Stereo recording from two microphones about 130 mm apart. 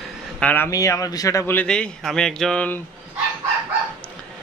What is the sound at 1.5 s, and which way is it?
A man's voice, 5° left (ahead or behind).